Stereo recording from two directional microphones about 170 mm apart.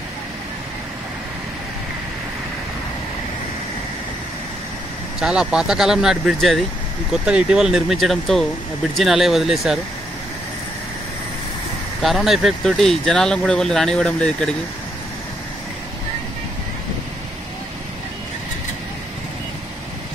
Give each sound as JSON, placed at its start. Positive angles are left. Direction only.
{"t": 5.2, "sound": "speech", "side_deg": -5}
{"t": 12.0, "sound": "speech", "side_deg": 0}